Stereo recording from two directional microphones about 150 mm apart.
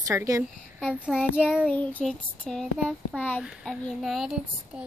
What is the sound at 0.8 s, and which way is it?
Speech, 5° right (ahead or behind).